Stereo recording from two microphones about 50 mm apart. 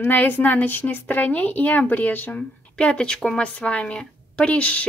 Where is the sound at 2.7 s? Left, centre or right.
Left.